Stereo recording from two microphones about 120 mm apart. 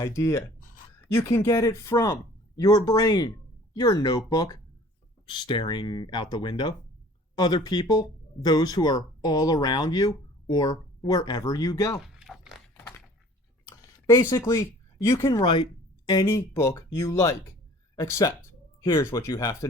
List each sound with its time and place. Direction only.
0.0 s speech: 25° left (ahead or behind)
12.0 s a sound: 5° right (ahead or behind)
13.7 s a sound: 30° left (ahead or behind)
15.0 s speech: 25° left (ahead or behind)
15.3 s speech: 40° left (ahead or behind)
16.2 s speech: 25° left (ahead or behind)